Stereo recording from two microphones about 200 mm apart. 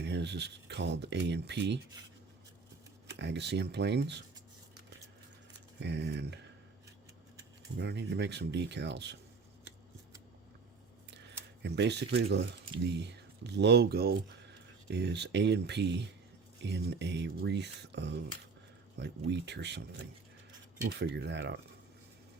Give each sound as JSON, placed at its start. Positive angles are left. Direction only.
{"t": 0.0, "sound": "speech", "side_deg": -60}
{"t": 3.2, "sound": "speech", "side_deg": -60}
{"t": 5.8, "sound": "speech", "side_deg": -60}
{"t": 7.8, "sound": "speech", "side_deg": -60}
{"t": 11.6, "sound": "speech", "side_deg": -55}